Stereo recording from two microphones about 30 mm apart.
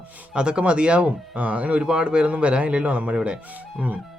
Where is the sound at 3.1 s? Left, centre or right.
Right.